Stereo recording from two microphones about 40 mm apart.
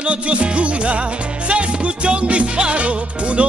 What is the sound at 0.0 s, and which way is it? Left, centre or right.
Music, right.